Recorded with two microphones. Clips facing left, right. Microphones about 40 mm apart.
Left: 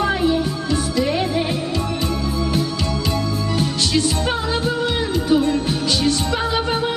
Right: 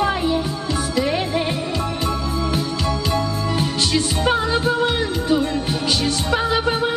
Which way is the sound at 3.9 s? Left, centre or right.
Centre.